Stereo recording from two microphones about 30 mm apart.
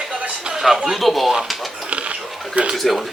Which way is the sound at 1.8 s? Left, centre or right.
Right.